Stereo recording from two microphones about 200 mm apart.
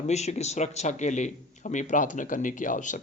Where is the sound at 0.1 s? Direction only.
35° left (ahead or behind).